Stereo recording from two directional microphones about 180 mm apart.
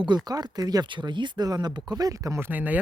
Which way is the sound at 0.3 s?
20° right (ahead or behind).